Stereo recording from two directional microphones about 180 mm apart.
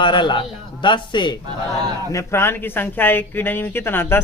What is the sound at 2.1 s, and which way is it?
A man's voice, 15° left (ahead or behind).